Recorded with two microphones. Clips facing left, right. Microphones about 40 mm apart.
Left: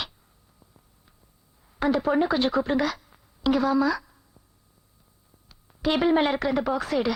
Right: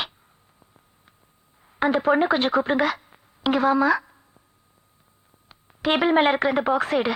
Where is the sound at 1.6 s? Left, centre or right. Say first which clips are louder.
Right 3 dB; right.